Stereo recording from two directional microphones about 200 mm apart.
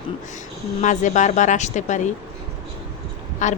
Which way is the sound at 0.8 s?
40° left (ahead or behind).